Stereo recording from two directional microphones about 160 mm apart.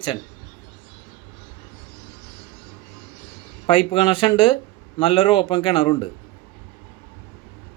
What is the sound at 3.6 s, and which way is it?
Speech, 35° left (ahead or behind).